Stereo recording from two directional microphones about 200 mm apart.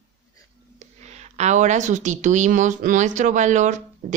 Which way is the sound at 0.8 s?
35° right (ahead or behind).